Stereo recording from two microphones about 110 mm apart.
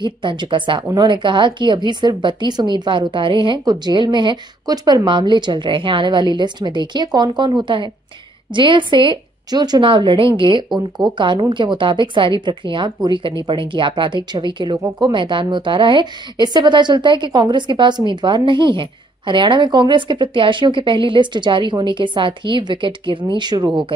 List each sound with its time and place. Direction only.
0.0 s a woman's voice: 45° right (ahead or behind)